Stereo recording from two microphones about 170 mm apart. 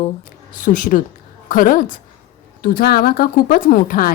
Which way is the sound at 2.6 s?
60° left (ahead or behind).